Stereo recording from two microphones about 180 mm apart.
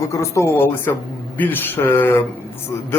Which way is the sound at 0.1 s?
15° left (ahead or behind).